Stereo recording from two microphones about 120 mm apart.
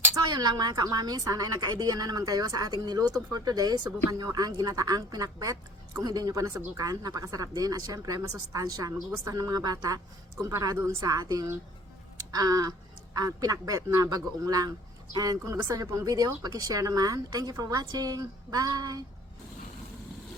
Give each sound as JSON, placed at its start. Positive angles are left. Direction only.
{"t": 0.3, "sound": "speech", "side_deg": -35}